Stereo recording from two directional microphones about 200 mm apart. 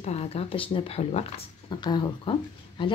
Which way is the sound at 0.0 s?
30° left (ahead or behind).